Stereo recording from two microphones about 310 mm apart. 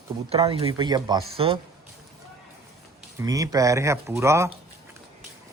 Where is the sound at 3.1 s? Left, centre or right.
Centre.